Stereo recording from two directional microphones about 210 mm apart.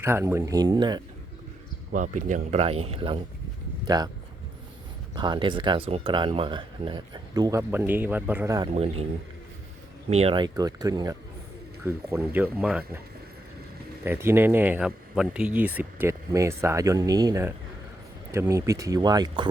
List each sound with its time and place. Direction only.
0.0 s speech: 10° right (ahead or behind)
1.9 s speech: 35° right (ahead or behind); by 4.1 s 20° right (ahead or behind)
5.1 s speech: 20° right (ahead or behind)
8.7 s speech: 30° right (ahead or behind)
10.1 s speech: 30° right (ahead or behind); by 13.0 s 5° right (ahead or behind)
14.0 s speech: 10° right (ahead or behind)